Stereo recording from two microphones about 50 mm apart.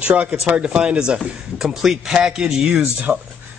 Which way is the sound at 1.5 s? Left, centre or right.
Centre.